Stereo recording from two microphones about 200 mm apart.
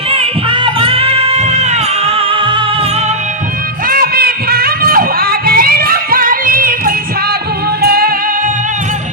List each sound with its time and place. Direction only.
0.1 s music: 25° right (ahead or behind)
3.8 s a sound: 45° right (ahead or behind)
7.8 s music: 50° right (ahead or behind)